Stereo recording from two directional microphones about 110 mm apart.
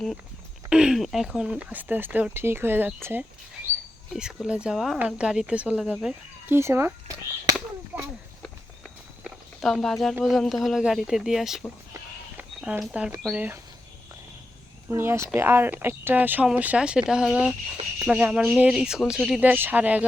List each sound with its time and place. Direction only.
0.7 s speech: 5° right (ahead or behind)
4.1 s speech: 5° right (ahead or behind)
6.5 s speech: 25° right (ahead or behind)
9.6 s speech: 5° left (ahead or behind)
12.4 s a sound: 15° right (ahead or behind)
12.8 s speech: 10° right (ahead or behind)
14.8 s speech: 25° right (ahead or behind)